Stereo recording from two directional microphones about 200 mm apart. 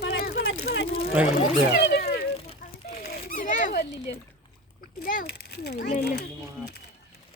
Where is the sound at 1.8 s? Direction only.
50° left (ahead or behind).